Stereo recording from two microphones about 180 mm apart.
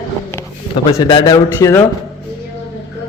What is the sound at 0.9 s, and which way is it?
Speech, 20° left (ahead or behind).